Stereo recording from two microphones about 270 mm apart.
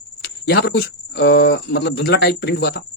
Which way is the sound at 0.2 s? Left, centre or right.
Left.